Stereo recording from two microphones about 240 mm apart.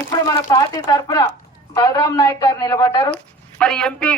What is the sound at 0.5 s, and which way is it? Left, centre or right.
Speech, centre.